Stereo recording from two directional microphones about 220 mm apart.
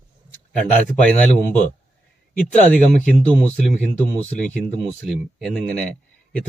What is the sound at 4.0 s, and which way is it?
A man's voice, 5° left (ahead or behind).